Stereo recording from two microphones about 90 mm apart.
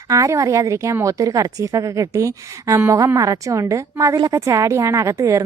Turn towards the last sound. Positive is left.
turn(degrees=-35)  # may be behind; listen again after turning